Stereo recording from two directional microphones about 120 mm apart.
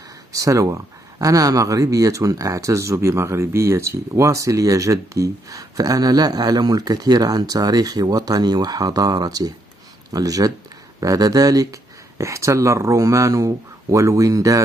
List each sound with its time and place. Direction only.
0.3 s speech: 25° right (ahead or behind)